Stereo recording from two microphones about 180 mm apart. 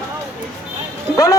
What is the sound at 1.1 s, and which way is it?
Speech, 15° left (ahead or behind).